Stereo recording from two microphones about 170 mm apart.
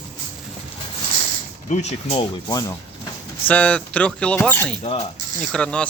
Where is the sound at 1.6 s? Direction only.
40° left (ahead or behind).